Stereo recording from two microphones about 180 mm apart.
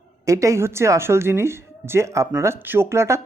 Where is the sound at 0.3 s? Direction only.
15° right (ahead or behind).